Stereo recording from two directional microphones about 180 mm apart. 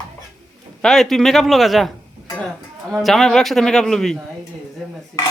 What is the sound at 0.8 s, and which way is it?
A man's voice, centre (ahead or behind).